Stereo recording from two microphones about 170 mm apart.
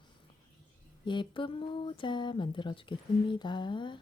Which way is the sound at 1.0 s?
25° left (ahead or behind).